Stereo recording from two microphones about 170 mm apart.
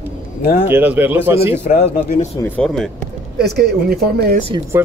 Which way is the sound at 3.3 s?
70° right (ahead or behind).